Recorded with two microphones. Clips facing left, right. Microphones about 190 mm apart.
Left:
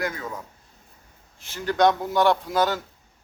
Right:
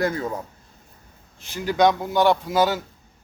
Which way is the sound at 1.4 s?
15° right (ahead or behind).